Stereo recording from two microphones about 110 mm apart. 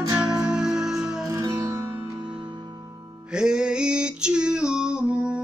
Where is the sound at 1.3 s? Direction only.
35° right (ahead or behind).